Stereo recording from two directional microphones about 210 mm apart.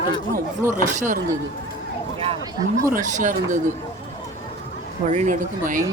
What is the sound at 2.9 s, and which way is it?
Speech, 35° right (ahead or behind).